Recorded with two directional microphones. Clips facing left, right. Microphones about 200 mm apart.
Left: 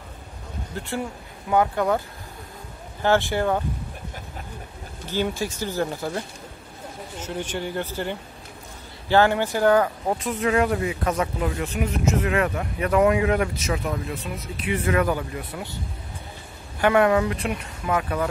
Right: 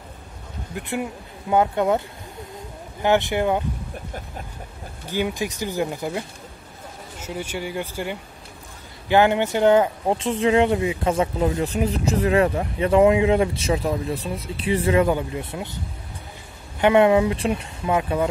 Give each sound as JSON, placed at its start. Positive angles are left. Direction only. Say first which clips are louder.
{"t": 0.7, "sound": "speech", "louder": "right 2 dB", "side_deg": -20}
{"t": 5.0, "sound": "speech", "louder": "right 1 dB", "side_deg": -15}
{"t": 16.8, "sound": "speech", "louder": "right 3 dB", "side_deg": -20}